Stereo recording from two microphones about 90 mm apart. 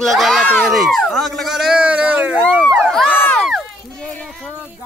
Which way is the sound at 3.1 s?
20° left (ahead or behind).